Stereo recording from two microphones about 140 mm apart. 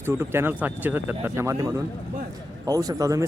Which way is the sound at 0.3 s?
15° right (ahead or behind).